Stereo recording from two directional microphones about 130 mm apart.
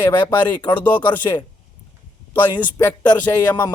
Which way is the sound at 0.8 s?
10° left (ahead or behind).